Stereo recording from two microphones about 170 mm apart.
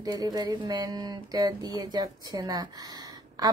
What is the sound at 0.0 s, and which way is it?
A woman's voice, 20° right (ahead or behind).